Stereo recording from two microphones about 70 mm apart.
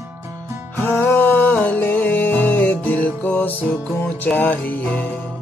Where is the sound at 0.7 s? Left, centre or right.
Left.